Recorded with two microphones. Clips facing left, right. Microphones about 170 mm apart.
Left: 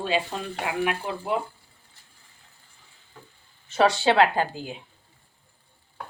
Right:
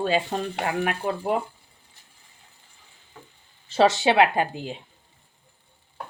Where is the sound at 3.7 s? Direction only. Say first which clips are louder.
Right 1 dB; 25° right (ahead or behind).